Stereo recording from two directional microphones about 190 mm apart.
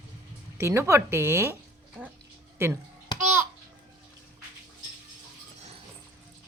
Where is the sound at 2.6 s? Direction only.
10° right (ahead or behind).